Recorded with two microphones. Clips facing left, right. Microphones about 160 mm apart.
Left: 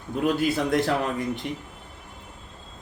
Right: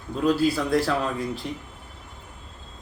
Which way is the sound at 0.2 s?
20° left (ahead or behind).